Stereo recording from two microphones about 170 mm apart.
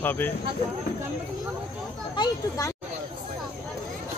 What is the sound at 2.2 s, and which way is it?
Speech, 20° left (ahead or behind).